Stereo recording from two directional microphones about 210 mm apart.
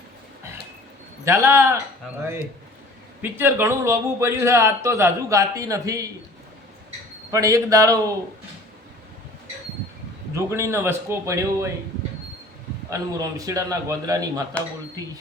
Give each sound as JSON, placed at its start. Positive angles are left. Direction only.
{"t": 1.2, "sound": "a man's voice", "side_deg": -10}
{"t": 3.2, "sound": "a man's voice", "side_deg": -10}
{"t": 7.3, "sound": "a man's voice", "side_deg": -15}
{"t": 10.3, "sound": "a man's voice", "side_deg": -15}
{"t": 12.9, "sound": "a man's voice", "side_deg": -15}